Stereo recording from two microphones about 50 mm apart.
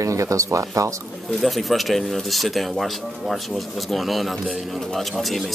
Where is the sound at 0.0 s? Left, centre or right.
Right.